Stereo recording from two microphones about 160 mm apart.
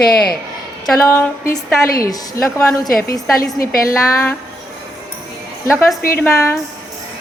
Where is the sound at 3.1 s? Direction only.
20° left (ahead or behind).